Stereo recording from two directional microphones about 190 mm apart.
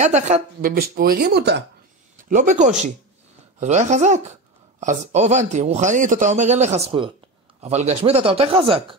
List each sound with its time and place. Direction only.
0.0 s speech: 35° right (ahead or behind); by 1.6 s 60° right (ahead or behind)
2.1 s speech: 40° right (ahead or behind)